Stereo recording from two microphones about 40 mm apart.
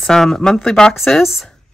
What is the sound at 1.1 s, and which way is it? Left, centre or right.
Speech, left.